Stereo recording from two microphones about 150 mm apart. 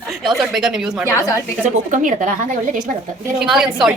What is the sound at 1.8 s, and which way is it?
Speech, 55° right (ahead or behind).